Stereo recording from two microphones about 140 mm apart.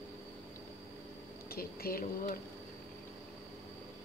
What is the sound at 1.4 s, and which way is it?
Speech, 90° left.